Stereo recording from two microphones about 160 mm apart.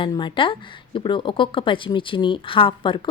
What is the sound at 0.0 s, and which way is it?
Speech, 30° left (ahead or behind).